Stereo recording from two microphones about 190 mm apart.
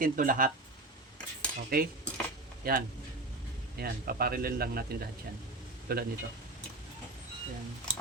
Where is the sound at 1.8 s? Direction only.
50° right (ahead or behind).